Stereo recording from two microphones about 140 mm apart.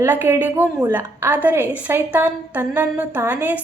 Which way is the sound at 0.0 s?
15° right (ahead or behind).